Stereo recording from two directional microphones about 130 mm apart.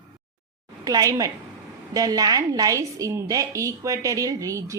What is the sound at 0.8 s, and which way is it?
A woman's voice, 25° right (ahead or behind).